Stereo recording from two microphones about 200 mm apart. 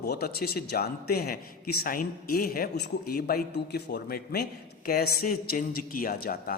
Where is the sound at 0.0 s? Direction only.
50° left (ahead or behind).